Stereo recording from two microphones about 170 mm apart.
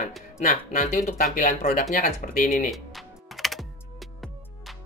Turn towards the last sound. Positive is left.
turn(degrees=0)  # may be behind; listen again after turning